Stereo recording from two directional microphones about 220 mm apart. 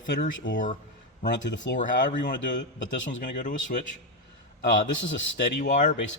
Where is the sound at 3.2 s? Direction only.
35° left (ahead or behind).